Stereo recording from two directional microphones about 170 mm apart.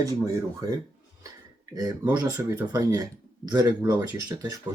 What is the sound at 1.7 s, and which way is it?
Speech, 20° right (ahead or behind).